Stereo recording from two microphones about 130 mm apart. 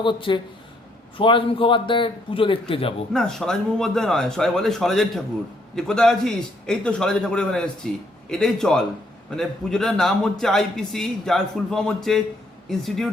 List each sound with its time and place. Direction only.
0.0 s a man's voice: 40° left (ahead or behind)
3.1 s a man's voice: 5° left (ahead or behind)